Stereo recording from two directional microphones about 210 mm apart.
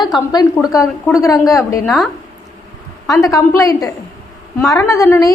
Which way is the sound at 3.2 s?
15° left (ahead or behind).